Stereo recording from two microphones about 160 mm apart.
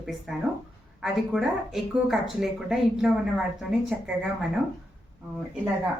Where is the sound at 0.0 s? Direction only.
5° right (ahead or behind).